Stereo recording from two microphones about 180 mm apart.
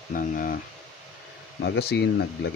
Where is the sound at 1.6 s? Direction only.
70° left (ahead or behind).